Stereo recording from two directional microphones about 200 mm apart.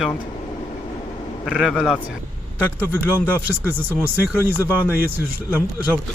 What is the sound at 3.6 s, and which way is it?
Speech, 10° right (ahead or behind).